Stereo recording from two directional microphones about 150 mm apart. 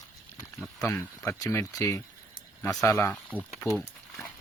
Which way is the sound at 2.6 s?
Centre (ahead or behind).